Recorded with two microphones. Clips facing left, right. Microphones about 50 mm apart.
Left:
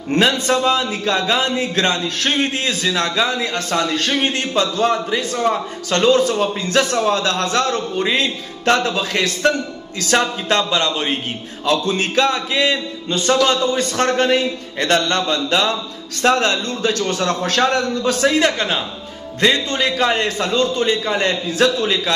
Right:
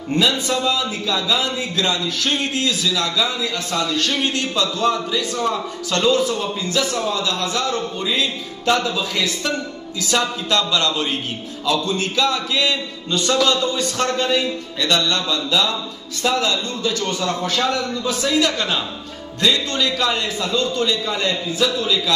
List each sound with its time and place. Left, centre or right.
0.1 s a man's voice: left
11.6 s a man's voice: left
18.4 s a man's voice: left